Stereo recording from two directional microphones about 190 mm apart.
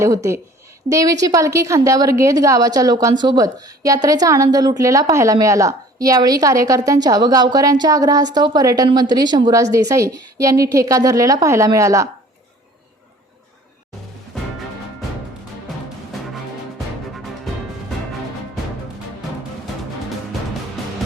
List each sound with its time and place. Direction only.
0.0 s a woman's voice: 15° right (ahead or behind)
16.3 s music: centre (ahead or behind)